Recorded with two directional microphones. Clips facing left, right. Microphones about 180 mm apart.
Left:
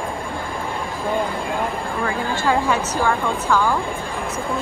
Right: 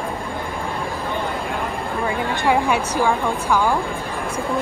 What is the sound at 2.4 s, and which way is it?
Speech, 15° right (ahead or behind).